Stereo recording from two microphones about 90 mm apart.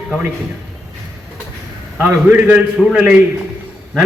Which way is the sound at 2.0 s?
15° right (ahead or behind).